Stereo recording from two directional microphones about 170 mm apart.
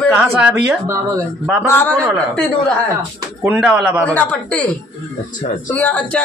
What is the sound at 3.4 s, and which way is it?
Speech, 10° right (ahead or behind).